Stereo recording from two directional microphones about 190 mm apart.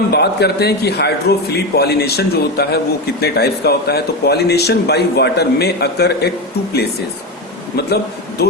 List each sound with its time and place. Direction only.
0.1 s a man's voice: 60° left (ahead or behind)
8.4 s a man's voice: 60° left (ahead or behind)